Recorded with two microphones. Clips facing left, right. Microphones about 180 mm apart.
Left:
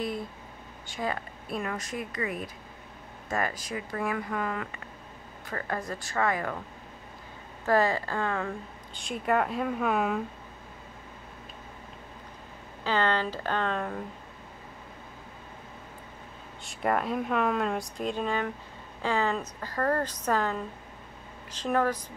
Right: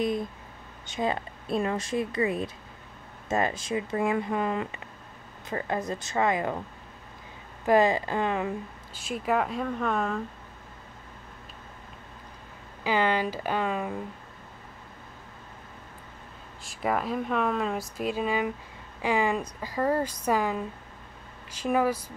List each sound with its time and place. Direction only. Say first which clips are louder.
0.8 s speech: right 4 dB; 20° right (ahead or behind)
7.6 s speech: right 3 dB; 15° right (ahead or behind)
8.9 s speech: even; 5° right (ahead or behind)
12.8 s speech: right 2 dB; 10° right (ahead or behind)
16.6 s speech: even; centre (ahead or behind)